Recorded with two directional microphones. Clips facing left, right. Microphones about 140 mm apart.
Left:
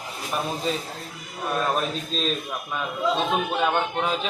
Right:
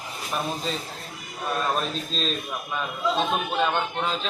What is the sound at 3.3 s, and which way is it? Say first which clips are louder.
Speech: left 1 dB; 10° left (ahead or behind).